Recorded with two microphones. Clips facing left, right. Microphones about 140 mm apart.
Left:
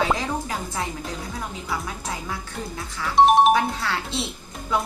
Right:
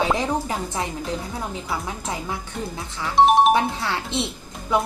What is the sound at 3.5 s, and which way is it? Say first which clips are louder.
Speech: right 1 dB; 20° right (ahead or behind).